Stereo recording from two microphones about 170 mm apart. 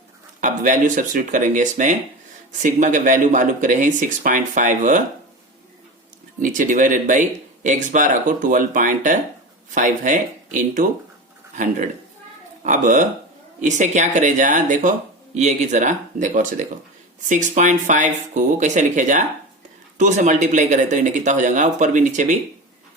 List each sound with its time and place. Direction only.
0.4 s speech: 50° right (ahead or behind)
6.4 s speech: 50° right (ahead or behind)